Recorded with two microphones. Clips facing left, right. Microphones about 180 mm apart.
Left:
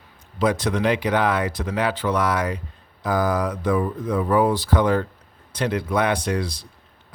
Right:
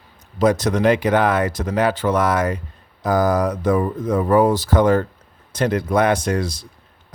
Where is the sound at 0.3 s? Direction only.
40° right (ahead or behind).